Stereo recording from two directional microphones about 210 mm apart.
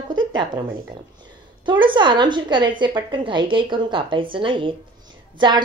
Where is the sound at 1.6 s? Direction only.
25° right (ahead or behind).